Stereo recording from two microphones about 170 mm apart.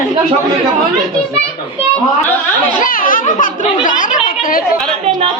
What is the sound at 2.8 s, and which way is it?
A child's voice, 55° left (ahead or behind).